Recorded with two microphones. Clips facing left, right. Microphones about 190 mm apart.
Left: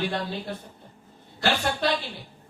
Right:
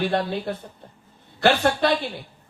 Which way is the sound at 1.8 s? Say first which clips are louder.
Right 4 dB; 60° right (ahead or behind).